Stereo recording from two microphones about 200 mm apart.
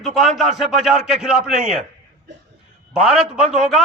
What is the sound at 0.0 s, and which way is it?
A man's voice, centre (ahead or behind).